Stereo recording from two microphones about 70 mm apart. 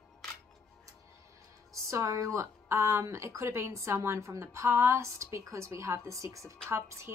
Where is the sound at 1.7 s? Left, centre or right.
Right.